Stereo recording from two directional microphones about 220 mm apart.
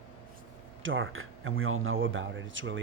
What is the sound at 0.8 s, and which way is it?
Speech, 60° right (ahead or behind).